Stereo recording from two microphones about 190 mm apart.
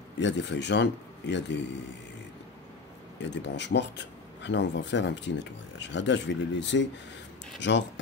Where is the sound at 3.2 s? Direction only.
65° left (ahead or behind).